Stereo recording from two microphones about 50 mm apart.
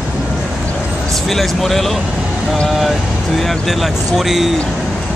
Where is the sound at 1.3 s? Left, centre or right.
Centre.